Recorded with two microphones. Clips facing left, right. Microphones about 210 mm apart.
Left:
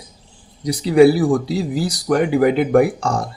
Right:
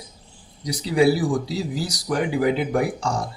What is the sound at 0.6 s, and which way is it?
Speech, 60° left (ahead or behind).